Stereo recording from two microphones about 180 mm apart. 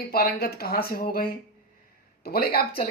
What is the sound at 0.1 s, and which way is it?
Speech, 60° left (ahead or behind).